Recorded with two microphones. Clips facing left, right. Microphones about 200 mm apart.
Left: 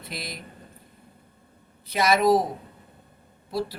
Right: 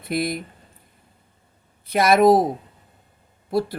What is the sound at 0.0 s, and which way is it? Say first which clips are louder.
Speech: right 13 dB; 55° right (ahead or behind).